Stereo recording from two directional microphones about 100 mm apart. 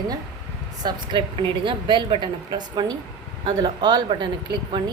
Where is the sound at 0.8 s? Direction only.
50° right (ahead or behind).